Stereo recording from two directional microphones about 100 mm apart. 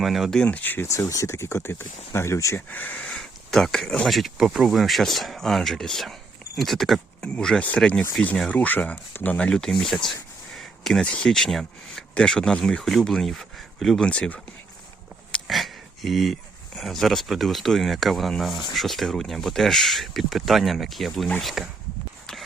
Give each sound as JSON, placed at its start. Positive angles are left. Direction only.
{"t": 0.0, "sound": "speech", "side_deg": 0}
{"t": 0.4, "sound": "speech", "side_deg": 15}
{"t": 0.9, "sound": "speech", "side_deg": 35}
{"t": 2.6, "sound": "speech", "side_deg": 15}
{"t": 15.3, "sound": "speech", "side_deg": 0}